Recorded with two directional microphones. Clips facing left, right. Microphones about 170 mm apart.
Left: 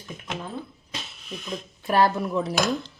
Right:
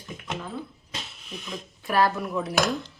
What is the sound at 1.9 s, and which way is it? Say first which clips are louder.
Speech: left 2 dB; 25° left (ahead or behind).